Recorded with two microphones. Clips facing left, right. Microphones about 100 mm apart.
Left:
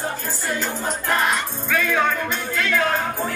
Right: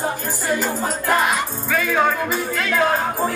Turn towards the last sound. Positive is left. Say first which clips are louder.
# right 3 dB
turn(degrees=-10)  # may be behind; listen again after turning